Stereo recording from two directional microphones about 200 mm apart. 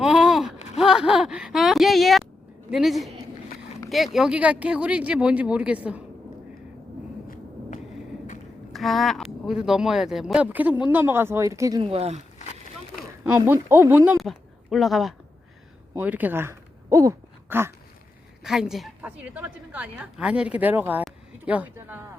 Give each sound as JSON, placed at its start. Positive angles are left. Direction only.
{"t": 0.0, "sound": "a sound", "side_deg": -5}
{"t": 2.6, "sound": "a woman's voice", "side_deg": 0}
{"t": 8.7, "sound": "a woman's voice", "side_deg": 0}
{"t": 11.9, "sound": "speech", "side_deg": -30}
{"t": 13.4, "sound": "speech", "side_deg": -10}
{"t": 18.4, "sound": "a woman's voice", "side_deg": 0}